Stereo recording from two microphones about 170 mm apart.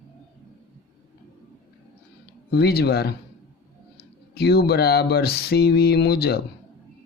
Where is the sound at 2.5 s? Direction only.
70° left (ahead or behind).